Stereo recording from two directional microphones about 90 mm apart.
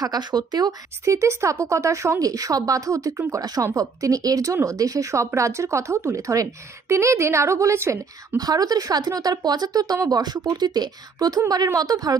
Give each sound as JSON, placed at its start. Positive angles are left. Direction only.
{"t": 0.0, "sound": "speech", "side_deg": -50}
{"t": 1.0, "sound": "speech", "side_deg": -35}
{"t": 8.4, "sound": "speech", "side_deg": -45}